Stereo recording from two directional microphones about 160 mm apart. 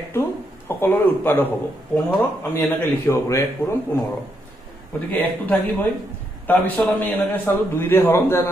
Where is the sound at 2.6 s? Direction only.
15° left (ahead or behind).